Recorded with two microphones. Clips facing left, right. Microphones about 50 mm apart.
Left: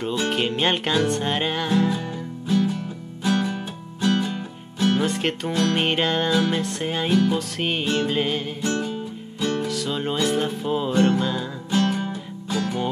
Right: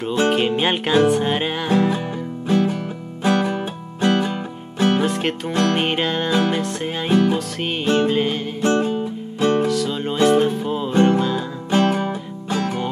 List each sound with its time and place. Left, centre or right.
0.3 s music: centre
1.7 s music: right
2.4 s music: right
5.0 s music: centre
7.1 s music: right
7.3 s music: centre
7.8 s music: right
8.1 s music: centre
8.5 s music: right
9.7 s music: centre
10.9 s music: right
11.1 s music: centre
11.7 s music: right